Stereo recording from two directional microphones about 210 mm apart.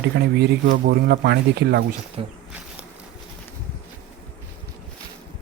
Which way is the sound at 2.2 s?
25° right (ahead or behind).